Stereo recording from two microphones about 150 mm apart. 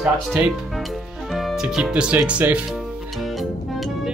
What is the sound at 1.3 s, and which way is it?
Speech, centre (ahead or behind).